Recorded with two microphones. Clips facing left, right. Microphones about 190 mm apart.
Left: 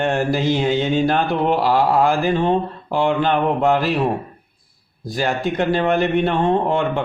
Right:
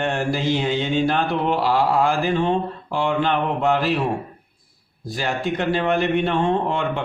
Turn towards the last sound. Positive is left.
turn(degrees=40)  # may be behind; listen again after turning